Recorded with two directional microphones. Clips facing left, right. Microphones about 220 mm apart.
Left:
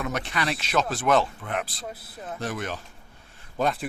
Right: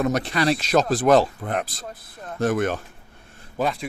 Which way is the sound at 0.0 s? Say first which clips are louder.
Right 7 dB; 35° right (ahead or behind).